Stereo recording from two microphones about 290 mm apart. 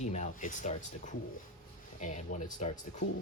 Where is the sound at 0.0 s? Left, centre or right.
Left.